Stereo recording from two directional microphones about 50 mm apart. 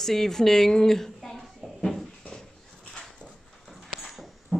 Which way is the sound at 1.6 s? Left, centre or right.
Centre.